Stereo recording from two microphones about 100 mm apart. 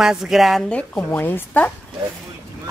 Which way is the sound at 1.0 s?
20° left (ahead or behind).